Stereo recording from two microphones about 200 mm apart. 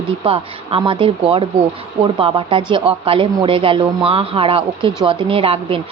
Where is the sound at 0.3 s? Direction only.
25° right (ahead or behind).